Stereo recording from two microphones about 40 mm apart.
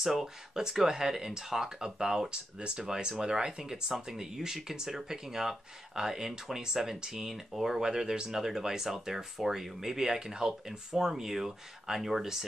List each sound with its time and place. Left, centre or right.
0.0 s speech: centre